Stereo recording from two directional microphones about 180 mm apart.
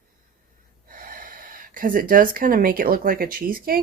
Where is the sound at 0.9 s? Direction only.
50° right (ahead or behind).